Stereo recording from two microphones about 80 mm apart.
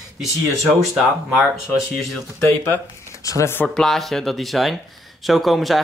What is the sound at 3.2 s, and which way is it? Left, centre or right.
Speech, left.